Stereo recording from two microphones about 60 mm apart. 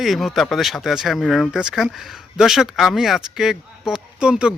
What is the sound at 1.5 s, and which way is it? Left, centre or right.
Speech, centre.